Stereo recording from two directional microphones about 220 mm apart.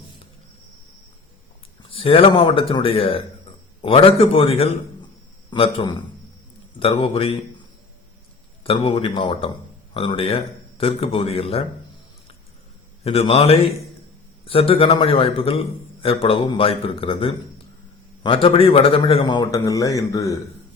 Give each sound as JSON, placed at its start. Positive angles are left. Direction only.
{"t": 1.9, "sound": "a man's voice", "side_deg": 25}
{"t": 8.6, "sound": "a man's voice", "side_deg": 25}
{"t": 13.1, "sound": "a man's voice", "side_deg": 25}
{"t": 18.4, "sound": "a man's voice", "side_deg": 25}